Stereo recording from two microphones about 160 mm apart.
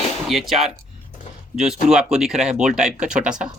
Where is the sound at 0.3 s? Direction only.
Centre (ahead or behind).